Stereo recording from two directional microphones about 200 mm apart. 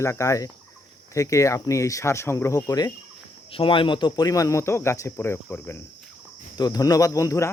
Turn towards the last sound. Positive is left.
turn(degrees=15)  # may be behind; listen again after turning